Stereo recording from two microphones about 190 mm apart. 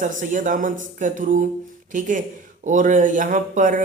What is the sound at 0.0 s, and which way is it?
Speech, 40° right (ahead or behind).